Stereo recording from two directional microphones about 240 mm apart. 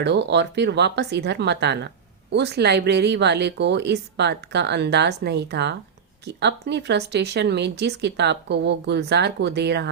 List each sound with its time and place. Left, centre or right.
0.0 s speech: right